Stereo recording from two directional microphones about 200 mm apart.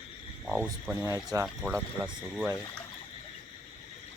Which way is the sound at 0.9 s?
15° right (ahead or behind).